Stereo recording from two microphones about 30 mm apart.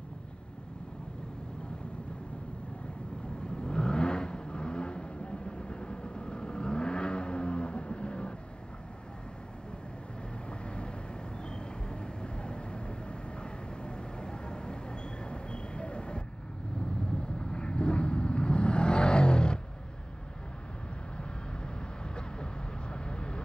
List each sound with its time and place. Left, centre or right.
3.4 s vehicle: left
10.6 s vehicle: left
17.4 s vehicle: left
21.2 s vehicle: left